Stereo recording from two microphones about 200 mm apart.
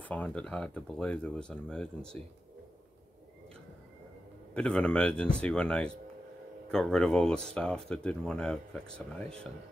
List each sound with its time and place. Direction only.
0.1 s speech: 5° left (ahead or behind)
4.6 s speech: 5° left (ahead or behind)